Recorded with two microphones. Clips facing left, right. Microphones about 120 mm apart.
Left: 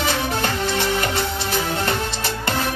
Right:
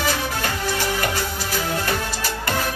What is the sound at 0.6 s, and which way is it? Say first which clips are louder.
Music: even; 25° left (ahead or behind).